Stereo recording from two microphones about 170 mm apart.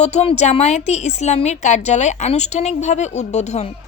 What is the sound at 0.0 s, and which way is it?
A woman's voice, 40° left (ahead or behind).